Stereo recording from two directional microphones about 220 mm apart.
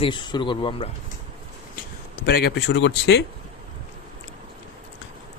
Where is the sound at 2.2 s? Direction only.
45° left (ahead or behind).